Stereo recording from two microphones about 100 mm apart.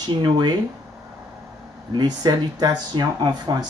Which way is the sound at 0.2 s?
45° right (ahead or behind).